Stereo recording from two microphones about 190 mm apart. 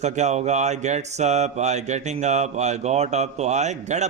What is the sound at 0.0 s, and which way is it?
A man's voice, 35° right (ahead or behind).